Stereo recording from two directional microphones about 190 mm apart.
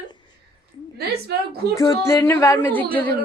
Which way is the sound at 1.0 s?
55° right (ahead or behind).